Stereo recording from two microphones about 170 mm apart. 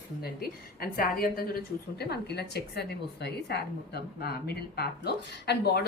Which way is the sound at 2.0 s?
70° left (ahead or behind).